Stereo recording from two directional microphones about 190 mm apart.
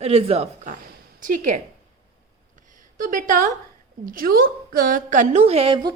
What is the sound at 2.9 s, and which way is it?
A woman's voice, 45° right (ahead or behind).